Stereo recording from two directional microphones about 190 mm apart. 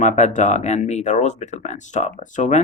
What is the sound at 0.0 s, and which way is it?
Speech, 40° left (ahead or behind).